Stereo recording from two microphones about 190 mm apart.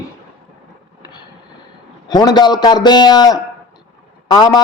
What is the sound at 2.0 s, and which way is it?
Speech, 20° left (ahead or behind).